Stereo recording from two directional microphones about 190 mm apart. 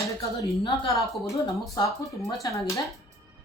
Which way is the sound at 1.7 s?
15° left (ahead or behind).